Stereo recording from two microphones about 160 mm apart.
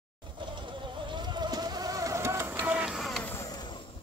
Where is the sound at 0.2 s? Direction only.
30° right (ahead or behind); by 3.3 s centre (ahead or behind).